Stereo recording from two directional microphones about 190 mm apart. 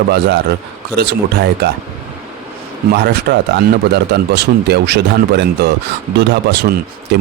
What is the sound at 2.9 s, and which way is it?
Speech, 60° right (ahead or behind).